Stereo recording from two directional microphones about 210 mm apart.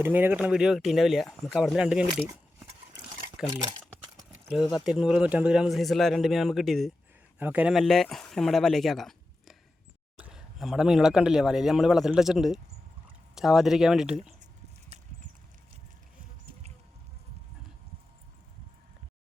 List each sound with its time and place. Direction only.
0.0 s speech: 10° right (ahead or behind)
4.6 s speech: 20° left (ahead or behind)
4.9 s a man's voice: 5° right (ahead or behind)
14.9 s a sound: 30° right (ahead or behind)